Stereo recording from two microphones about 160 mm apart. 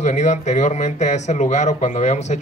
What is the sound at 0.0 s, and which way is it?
Speech, 45° left (ahead or behind).